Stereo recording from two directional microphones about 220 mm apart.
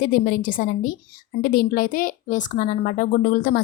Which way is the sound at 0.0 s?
40° left (ahead or behind).